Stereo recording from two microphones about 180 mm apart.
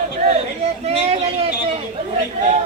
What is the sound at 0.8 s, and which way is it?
Speech, 35° right (ahead or behind).